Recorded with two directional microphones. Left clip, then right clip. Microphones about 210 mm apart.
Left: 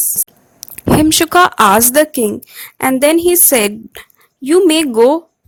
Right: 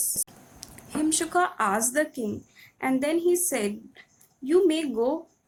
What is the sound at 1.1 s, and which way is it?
A woman's voice, 40° left (ahead or behind).